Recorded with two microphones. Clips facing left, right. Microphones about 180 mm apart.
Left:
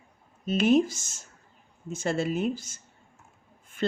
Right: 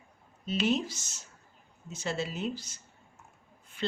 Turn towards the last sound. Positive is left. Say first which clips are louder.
# left 6 dB
turn(degrees=50)  # may be behind; listen again after turning